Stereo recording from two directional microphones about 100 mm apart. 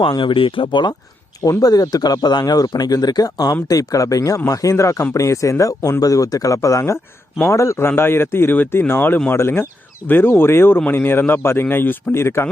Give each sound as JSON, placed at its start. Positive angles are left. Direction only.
{"t": 0.1, "sound": "speech", "side_deg": 55}
{"t": 1.5, "sound": "speech", "side_deg": 40}